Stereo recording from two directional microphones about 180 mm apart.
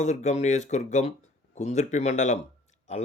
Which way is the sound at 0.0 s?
40° left (ahead or behind).